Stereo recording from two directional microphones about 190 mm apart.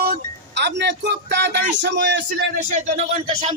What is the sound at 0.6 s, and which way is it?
Speech, 65° right (ahead or behind).